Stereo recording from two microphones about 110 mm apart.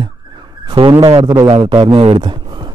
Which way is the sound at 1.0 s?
55° right (ahead or behind).